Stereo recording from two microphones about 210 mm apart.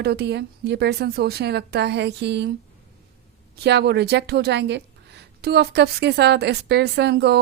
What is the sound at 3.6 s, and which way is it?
A woman's voice, 50° right (ahead or behind).